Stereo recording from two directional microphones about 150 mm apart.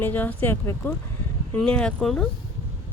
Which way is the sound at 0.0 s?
10° left (ahead or behind).